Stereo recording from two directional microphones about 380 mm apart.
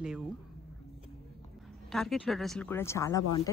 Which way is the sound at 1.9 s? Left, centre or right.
Centre.